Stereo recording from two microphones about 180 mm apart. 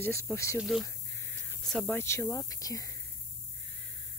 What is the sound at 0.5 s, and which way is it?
Speech, centre (ahead or behind).